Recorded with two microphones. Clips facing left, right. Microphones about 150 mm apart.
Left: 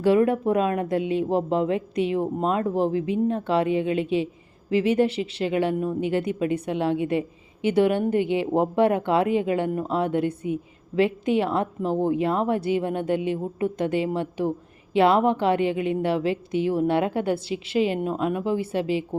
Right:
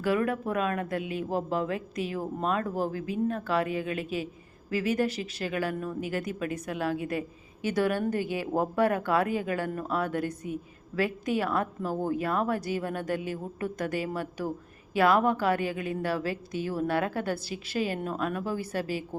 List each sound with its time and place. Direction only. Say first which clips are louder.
0.0 s speech: left 8 dB; 30° left (ahead or behind)